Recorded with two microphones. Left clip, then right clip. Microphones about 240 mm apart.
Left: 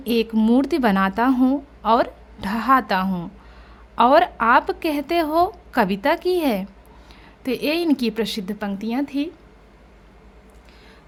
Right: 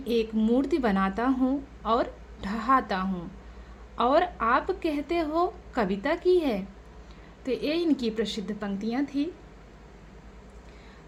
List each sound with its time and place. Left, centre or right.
0.0 s a woman's voice: left